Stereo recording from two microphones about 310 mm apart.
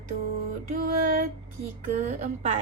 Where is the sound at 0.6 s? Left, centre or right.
Right.